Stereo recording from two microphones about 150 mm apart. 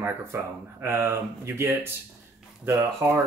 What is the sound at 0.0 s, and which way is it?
Speech, 15° right (ahead or behind).